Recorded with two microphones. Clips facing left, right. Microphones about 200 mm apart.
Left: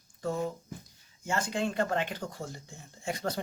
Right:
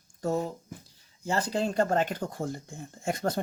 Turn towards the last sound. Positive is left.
turn(degrees=-50)  # may be behind; listen again after turning